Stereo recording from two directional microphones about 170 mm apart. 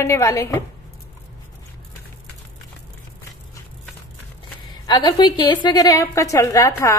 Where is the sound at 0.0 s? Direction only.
15° left (ahead or behind).